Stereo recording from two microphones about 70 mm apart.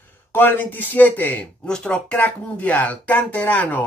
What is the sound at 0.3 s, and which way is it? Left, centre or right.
Speech, left.